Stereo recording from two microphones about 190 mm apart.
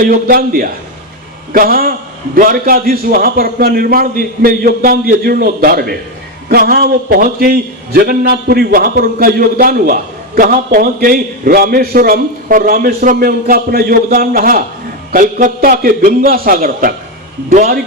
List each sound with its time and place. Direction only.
0.0 s a man's voice: 50° right (ahead or behind)